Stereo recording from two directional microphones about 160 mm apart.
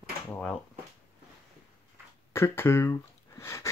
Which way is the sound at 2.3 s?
15° left (ahead or behind).